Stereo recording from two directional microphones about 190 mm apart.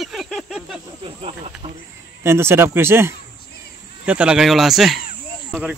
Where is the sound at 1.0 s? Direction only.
30° right (ahead or behind).